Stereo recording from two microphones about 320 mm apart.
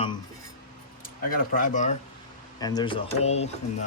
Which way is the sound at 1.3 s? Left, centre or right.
Left.